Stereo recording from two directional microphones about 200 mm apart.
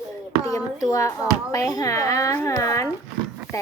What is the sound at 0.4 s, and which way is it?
A child's voice, 15° left (ahead or behind).